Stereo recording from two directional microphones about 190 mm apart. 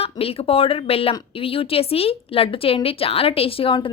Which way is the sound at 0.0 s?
30° left (ahead or behind).